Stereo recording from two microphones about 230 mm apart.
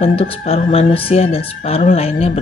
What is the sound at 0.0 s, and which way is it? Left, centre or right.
Speech, left.